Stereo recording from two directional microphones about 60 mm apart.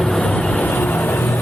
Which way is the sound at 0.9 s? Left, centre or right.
Left.